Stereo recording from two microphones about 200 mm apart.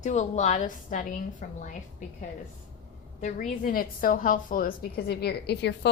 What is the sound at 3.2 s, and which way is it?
A woman's voice, 40° left (ahead or behind).